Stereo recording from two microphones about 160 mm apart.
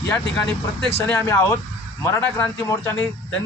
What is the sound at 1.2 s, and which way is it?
A man's voice, 20° left (ahead or behind).